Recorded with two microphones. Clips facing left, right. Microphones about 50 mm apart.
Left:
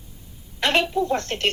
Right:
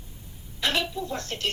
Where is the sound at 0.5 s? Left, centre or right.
Left.